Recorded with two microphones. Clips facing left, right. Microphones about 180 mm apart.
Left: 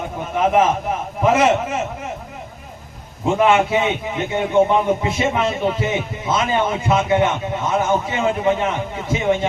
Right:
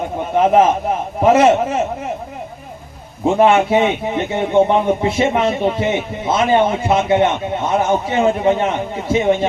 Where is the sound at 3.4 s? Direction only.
30° right (ahead or behind).